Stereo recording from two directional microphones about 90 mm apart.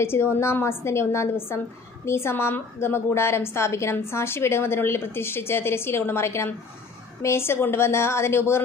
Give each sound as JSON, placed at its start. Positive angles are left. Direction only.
{"t": 0.0, "sound": "a woman's voice", "side_deg": 25}